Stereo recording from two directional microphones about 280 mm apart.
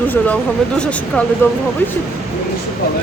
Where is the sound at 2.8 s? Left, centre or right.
Left.